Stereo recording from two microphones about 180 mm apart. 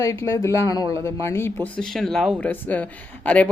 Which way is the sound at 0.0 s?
15° left (ahead or behind).